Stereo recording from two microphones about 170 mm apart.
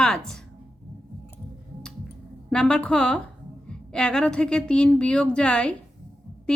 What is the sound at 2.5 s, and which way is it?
A woman's voice, 5° left (ahead or behind).